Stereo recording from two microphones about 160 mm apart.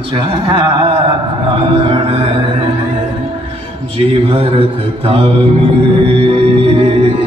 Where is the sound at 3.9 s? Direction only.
35° right (ahead or behind).